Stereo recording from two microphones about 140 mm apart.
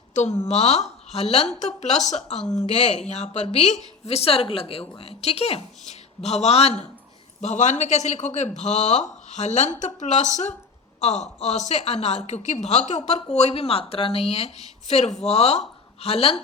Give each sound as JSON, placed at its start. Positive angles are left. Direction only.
{"t": 0.1, "sound": "speech", "side_deg": 55}
{"t": 7.4, "sound": "speech", "side_deg": 60}